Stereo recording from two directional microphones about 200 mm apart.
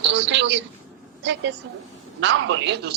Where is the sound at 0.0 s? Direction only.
65° right (ahead or behind).